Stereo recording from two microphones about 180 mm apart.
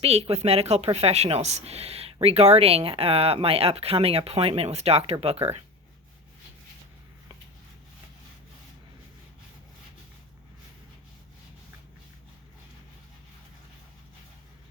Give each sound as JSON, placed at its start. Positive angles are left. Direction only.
{"t": 0.0, "sound": "a woman's voice", "side_deg": -35}